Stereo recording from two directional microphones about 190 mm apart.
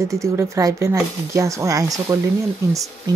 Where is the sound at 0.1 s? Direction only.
15° right (ahead or behind).